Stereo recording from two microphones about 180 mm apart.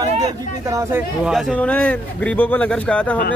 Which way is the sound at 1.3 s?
5° left (ahead or behind).